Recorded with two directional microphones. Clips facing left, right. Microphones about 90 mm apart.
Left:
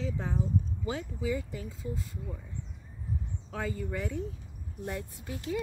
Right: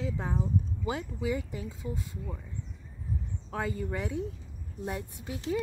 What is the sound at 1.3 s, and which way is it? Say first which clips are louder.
Speech: even; 20° right (ahead or behind).